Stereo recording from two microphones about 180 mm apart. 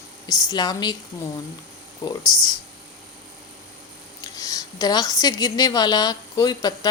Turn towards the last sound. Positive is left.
turn(degrees=20)  # may be behind; listen again after turning